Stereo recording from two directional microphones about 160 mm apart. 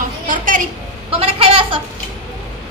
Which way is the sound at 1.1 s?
35° right (ahead or behind).